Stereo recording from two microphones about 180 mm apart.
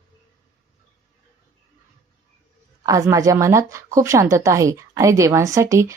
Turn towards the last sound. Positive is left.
turn(degrees=-15)  # may be behind; listen again after turning